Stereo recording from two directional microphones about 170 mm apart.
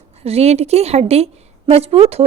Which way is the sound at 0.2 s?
35° right (ahead or behind).